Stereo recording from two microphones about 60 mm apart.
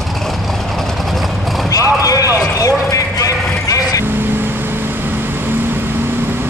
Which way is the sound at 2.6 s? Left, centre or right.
Left.